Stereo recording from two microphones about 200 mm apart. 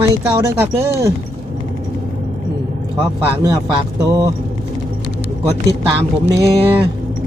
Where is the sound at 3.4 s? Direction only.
20° right (ahead or behind).